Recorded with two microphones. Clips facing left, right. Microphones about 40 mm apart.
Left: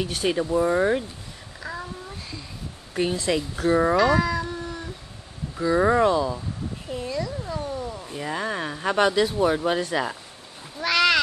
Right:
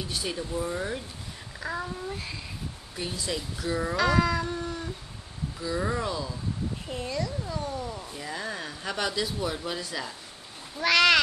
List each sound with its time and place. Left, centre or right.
0.0 s speech: left
1.6 s babbling: centre
2.1 s a sound: centre
2.9 s speech: left
3.9 s cat: centre
5.6 s speech: left
7.1 s a child's voice: centre
7.6 s wild animals: centre
8.1 s speech: left
10.8 s speech: centre